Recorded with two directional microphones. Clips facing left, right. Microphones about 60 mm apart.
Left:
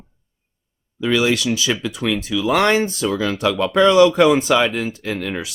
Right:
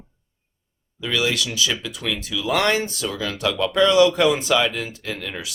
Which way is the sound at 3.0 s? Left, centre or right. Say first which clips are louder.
Left 5 dB; left.